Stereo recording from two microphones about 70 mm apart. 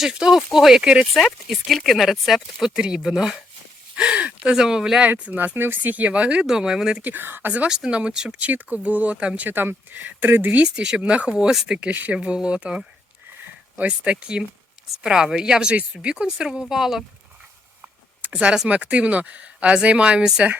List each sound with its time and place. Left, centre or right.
0.0 s speech: centre
1.1 s speech: centre
3.9 s gasp: centre
4.5 s speech: centre
5.5 s speech: right; by 7.0 s centre
7.0 s speech: right
7.7 s speech: centre
9.5 s speech: right; by 11.8 s centre
11.8 s speech: right; by 17.0 s centre
18.3 s speech: centre